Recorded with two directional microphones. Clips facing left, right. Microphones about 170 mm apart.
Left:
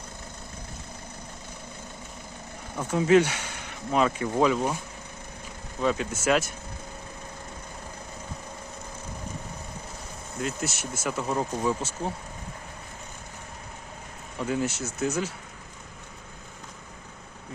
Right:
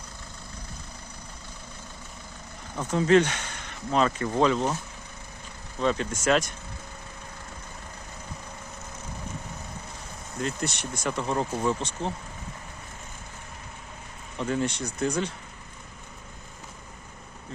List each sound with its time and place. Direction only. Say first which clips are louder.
2.7 s speech: even; 10° left (ahead or behind)
5.8 s speech: even; 5° left (ahead or behind)
10.4 s speech: right 1 dB; 5° left (ahead or behind)
14.3 s speech: even; 5° left (ahead or behind)